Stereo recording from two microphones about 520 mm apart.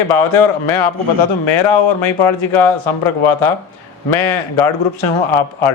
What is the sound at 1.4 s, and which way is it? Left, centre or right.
Speech, left.